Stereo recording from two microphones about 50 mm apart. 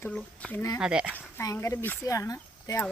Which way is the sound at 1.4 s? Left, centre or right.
Left.